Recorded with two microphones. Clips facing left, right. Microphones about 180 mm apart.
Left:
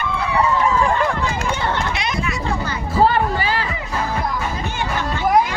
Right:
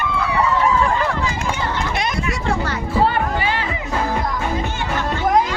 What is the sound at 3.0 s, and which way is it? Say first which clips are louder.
Music: left 3 dB; 40° left (ahead or behind).